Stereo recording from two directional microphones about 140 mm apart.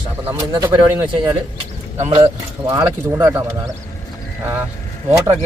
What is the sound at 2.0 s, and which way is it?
Speech, 50° right (ahead or behind).